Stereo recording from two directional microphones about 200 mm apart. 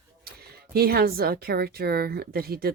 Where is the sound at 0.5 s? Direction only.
50° right (ahead or behind).